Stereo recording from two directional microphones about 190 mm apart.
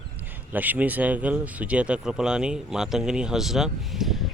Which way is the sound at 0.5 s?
10° right (ahead or behind).